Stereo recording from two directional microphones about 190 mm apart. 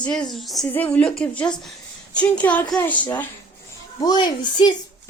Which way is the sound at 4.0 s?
20° left (ahead or behind).